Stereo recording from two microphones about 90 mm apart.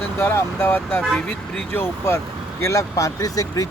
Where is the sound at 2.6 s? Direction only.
35° left (ahead or behind).